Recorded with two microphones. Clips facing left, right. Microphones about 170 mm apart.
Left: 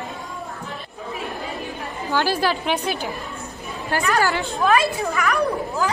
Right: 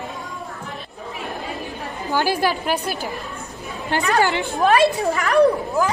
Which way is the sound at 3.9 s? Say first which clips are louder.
Right 2 dB; 25° right (ahead or behind).